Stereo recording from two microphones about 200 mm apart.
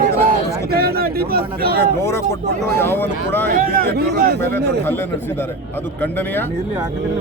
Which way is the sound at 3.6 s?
45° right (ahead or behind).